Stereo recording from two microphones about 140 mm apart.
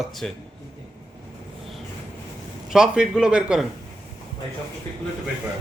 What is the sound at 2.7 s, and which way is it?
Speech, 5° right (ahead or behind).